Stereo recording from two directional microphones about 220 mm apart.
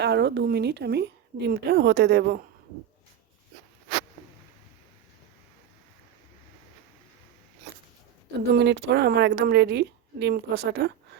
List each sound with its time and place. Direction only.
0.0 s a woman's voice: 50° right (ahead or behind)
8.5 s a woman's voice: 50° right (ahead or behind)